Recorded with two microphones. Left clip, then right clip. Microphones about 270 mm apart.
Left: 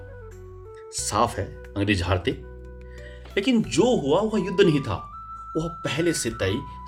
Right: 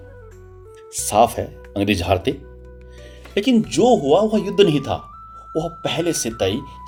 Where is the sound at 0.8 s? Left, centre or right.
Centre.